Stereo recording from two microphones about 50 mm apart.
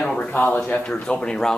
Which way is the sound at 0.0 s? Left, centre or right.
Left.